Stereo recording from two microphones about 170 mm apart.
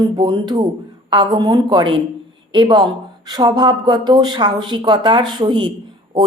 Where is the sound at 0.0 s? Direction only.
25° right (ahead or behind).